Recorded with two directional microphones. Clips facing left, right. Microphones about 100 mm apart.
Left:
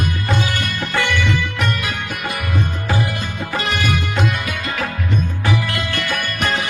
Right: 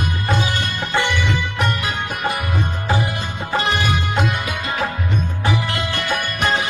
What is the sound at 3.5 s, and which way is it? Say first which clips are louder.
Music: right 2 dB; 25° right (ahead or behind).